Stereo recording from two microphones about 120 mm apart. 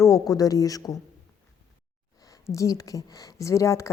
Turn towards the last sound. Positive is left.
turn(degrees=25)  # may be behind; listen again after turning